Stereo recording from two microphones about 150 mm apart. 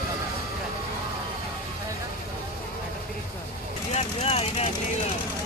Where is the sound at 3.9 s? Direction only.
40° left (ahead or behind).